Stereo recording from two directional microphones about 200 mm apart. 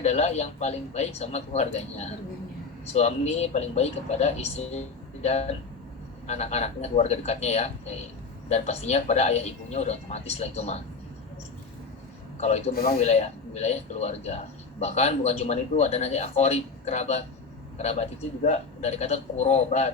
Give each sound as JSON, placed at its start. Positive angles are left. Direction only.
{"t": 0.0, "sound": "a man's voice", "side_deg": 35}
{"t": 12.4, "sound": "a man's voice", "side_deg": 35}
{"t": 12.7, "sound": "a man's voice", "side_deg": 50}
{"t": 13.0, "sound": "a man's voice", "side_deg": 30}